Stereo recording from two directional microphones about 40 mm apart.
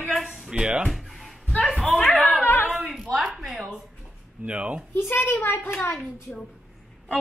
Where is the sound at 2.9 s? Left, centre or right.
Centre.